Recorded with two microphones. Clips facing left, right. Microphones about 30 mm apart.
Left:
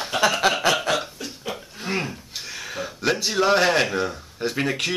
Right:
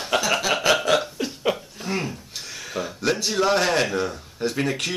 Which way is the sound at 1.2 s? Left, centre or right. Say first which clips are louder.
Right 6 dB; centre.